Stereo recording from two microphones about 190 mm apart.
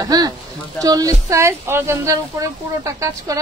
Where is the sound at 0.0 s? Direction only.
20° right (ahead or behind).